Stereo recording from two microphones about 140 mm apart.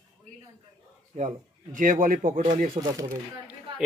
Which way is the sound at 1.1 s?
65° right (ahead or behind).